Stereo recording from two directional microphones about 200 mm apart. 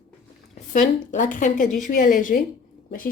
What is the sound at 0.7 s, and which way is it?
A woman's voice, 40° left (ahead or behind).